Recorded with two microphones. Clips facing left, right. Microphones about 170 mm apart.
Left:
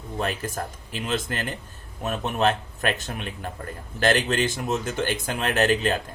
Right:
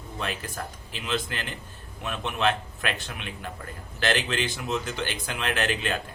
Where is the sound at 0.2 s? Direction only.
45° left (ahead or behind).